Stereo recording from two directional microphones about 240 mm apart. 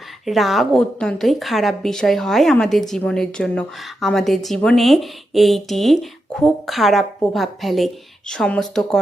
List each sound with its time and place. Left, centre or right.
0.3 s a woman's voice: centre